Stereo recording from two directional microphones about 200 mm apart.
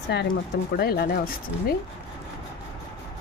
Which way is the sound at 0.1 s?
55° left (ahead or behind).